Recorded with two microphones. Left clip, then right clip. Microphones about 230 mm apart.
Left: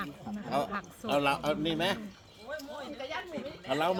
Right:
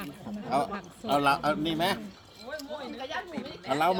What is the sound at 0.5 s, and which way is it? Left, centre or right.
Speech, centre.